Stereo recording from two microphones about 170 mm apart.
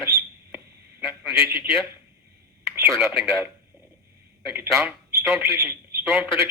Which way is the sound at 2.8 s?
15° right (ahead or behind).